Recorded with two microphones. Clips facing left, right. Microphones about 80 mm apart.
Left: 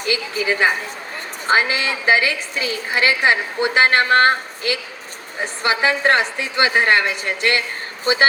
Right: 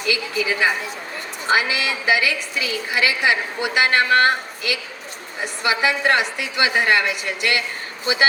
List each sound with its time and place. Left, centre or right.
0.0 s a woman's voice: left